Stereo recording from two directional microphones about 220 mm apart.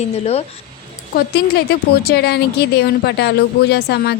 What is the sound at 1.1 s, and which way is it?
A woman's voice, 45° left (ahead or behind).